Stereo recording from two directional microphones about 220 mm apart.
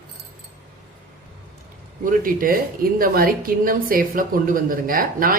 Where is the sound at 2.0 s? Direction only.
40° right (ahead or behind).